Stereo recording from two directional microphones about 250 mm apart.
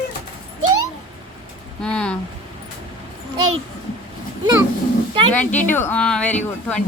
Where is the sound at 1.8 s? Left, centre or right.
Centre.